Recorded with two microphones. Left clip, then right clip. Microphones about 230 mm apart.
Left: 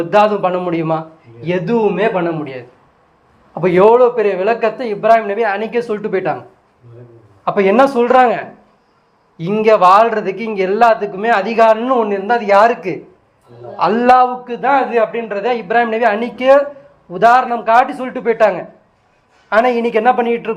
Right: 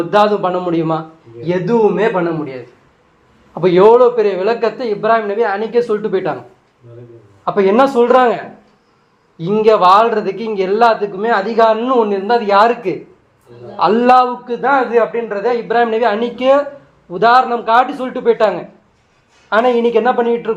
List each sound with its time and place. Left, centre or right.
0.0 s a man's voice: centre
7.4 s a man's voice: centre